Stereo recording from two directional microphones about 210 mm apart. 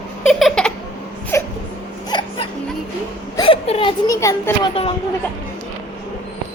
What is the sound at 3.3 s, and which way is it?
Speech, 25° left (ahead or behind).